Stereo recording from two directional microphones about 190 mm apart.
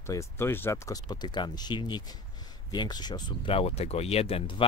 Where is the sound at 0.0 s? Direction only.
15° left (ahead or behind).